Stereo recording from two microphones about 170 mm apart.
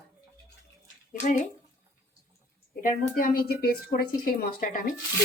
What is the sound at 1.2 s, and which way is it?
Speech, 45° left (ahead or behind).